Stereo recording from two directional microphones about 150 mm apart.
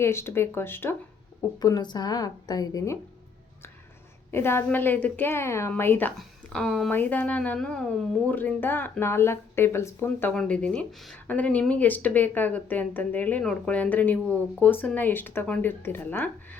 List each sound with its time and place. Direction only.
0.0 s speech: 15° left (ahead or behind)
1.5 s a woman's voice: 25° left (ahead or behind)
4.3 s speech: 15° left (ahead or behind)